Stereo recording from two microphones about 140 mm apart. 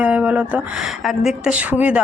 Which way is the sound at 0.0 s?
10° right (ahead or behind).